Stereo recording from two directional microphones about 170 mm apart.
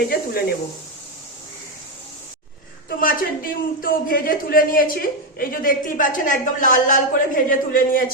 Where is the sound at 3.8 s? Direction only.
55° left (ahead or behind).